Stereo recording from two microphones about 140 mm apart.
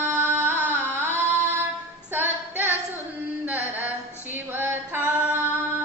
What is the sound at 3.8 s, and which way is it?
Female singing, 15° right (ahead or behind).